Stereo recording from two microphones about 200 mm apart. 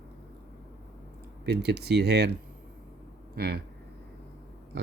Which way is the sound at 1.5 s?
55° right (ahead or behind).